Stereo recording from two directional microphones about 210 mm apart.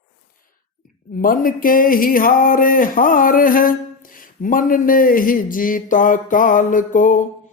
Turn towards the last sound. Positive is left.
turn(degrees=40)  # may be behind; listen again after turning